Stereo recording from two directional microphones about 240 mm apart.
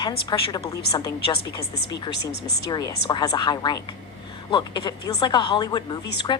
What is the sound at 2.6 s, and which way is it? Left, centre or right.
Speech, centre.